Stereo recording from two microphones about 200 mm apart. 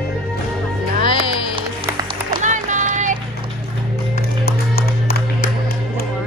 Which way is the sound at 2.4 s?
40° right (ahead or behind).